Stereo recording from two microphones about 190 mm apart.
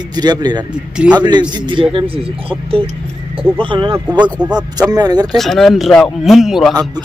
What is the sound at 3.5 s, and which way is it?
Speech, 25° right (ahead or behind).